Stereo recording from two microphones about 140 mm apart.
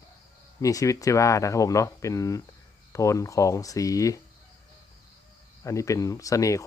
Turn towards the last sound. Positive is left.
turn(degrees=20)  # may be behind; listen again after turning